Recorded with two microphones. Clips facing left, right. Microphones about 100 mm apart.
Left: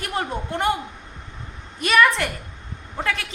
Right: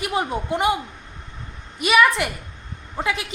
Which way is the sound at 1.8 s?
5° right (ahead or behind).